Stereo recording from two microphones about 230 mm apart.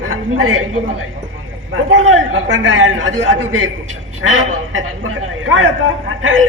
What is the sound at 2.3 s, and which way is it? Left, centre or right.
Speech, right.